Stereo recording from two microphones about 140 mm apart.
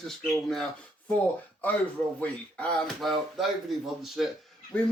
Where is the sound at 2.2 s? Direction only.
10° left (ahead or behind).